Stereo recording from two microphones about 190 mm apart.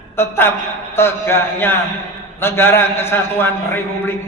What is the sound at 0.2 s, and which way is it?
A man's voice, 15° left (ahead or behind).